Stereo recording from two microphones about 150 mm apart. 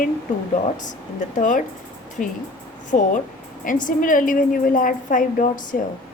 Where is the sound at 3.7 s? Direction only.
60° left (ahead or behind).